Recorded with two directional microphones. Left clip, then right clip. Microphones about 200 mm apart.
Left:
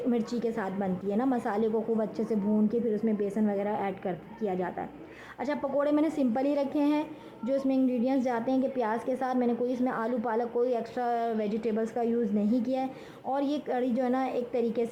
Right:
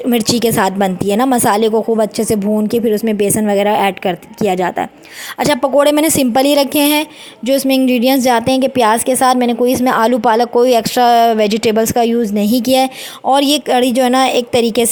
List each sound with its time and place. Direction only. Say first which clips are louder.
0.1 s speech: right 19 dB; 40° right (ahead or behind)